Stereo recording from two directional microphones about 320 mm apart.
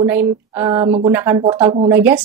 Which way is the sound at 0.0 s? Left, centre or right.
Centre.